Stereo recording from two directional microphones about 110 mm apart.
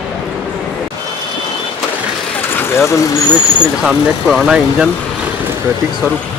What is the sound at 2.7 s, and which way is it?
Vehicle, 25° left (ahead or behind).